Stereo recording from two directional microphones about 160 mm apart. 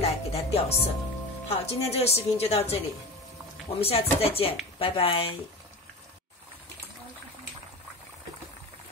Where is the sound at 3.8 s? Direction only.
40° left (ahead or behind).